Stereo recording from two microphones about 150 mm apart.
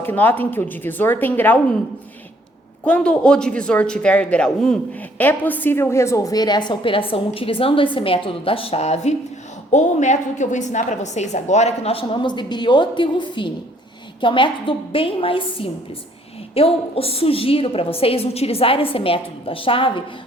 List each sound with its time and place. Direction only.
0.0 s speech: 10° left (ahead or behind)
2.8 s a woman's voice: 5° left (ahead or behind); by 19.9 s 35° left (ahead or behind)